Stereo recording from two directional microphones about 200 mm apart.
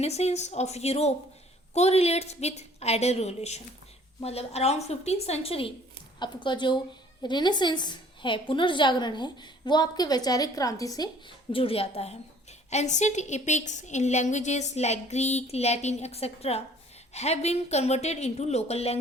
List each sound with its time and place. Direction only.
0.0 s a woman's voice: 30° left (ahead or behind)